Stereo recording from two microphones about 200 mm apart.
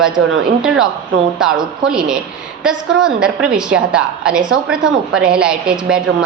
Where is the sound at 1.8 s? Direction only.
5° right (ahead or behind).